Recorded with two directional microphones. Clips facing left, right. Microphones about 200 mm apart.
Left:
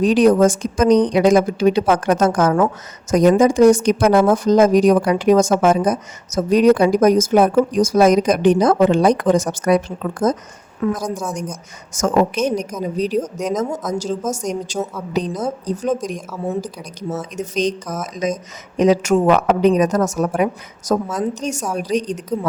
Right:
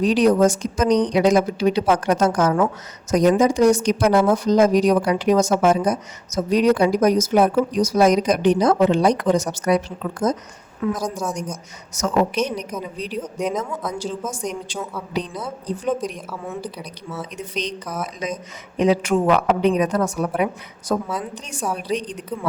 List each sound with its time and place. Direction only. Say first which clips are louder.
0.0 s a woman's voice: left 3 dB; 50° left (ahead or behind)